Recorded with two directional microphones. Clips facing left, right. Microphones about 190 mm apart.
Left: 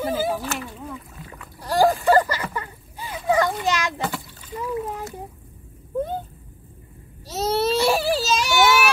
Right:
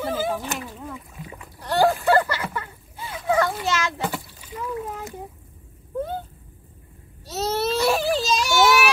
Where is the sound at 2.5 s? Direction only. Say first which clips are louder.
Left 1 dB; 15° left (ahead or behind).